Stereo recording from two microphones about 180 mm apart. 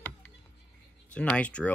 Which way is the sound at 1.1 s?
5° left (ahead or behind).